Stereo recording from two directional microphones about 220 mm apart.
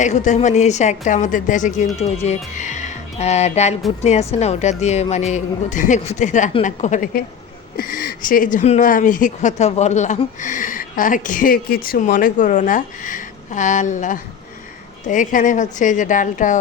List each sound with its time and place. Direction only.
0.0 s speech: 30° left (ahead or behind)